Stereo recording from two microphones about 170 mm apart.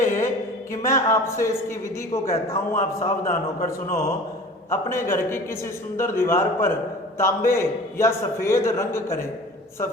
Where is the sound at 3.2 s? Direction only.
55° left (ahead or behind).